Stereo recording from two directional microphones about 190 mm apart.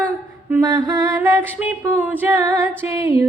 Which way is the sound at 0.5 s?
15° right (ahead or behind).